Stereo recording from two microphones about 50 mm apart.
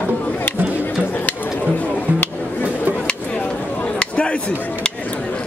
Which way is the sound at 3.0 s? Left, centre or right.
Left.